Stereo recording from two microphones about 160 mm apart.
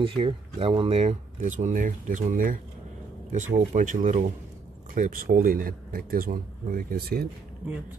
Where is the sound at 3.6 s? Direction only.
50° right (ahead or behind); by 7.3 s 75° right (ahead or behind).